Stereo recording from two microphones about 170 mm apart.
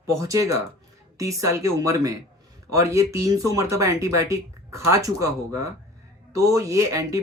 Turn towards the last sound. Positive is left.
turn(degrees=-20)  # may be behind; listen again after turning